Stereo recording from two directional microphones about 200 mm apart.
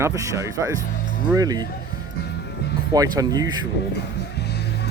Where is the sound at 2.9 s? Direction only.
20° right (ahead or behind).